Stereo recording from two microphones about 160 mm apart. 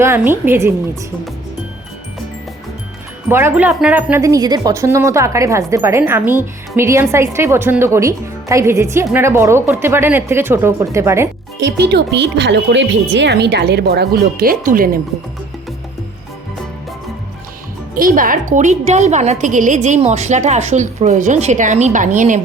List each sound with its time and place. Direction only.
0.0 s speech: 15° right (ahead or behind)
3.2 s speech: 15° right (ahead or behind)
11.6 s speech: 90° right; by 14.8 s 60° right (ahead or behind)
17.9 s a woman's voice: 60° right (ahead or behind)